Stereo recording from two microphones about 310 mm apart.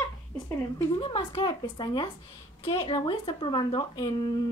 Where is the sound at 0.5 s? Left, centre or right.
Centre.